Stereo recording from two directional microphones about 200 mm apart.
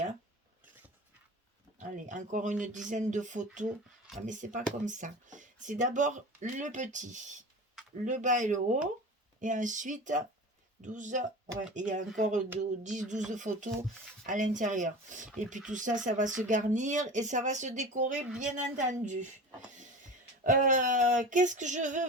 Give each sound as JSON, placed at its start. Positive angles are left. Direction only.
{"t": 1.8, "sound": "speech", "side_deg": -40}
{"t": 20.4, "sound": "speech", "side_deg": -40}